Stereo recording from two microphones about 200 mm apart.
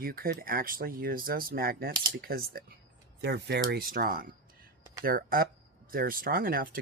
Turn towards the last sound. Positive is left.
turn(degrees=-45)  # may be behind; listen again after turning